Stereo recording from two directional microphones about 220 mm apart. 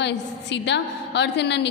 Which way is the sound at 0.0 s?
50° left (ahead or behind).